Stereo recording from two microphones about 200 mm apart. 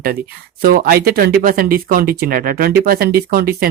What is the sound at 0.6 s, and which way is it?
Speech, 45° right (ahead or behind).